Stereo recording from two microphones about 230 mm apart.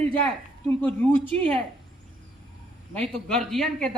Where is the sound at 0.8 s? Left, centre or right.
Centre.